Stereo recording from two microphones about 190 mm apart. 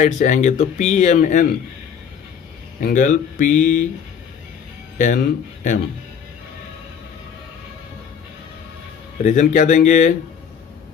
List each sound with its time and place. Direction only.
0.0 s speech: 40° left (ahead or behind)
2.8 s speech: 40° left (ahead or behind)
4.9 s speech: 40° left (ahead or behind)
9.2 s speech: 40° left (ahead or behind)